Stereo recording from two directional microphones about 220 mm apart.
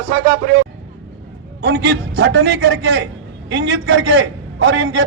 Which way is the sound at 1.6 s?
50° right (ahead or behind).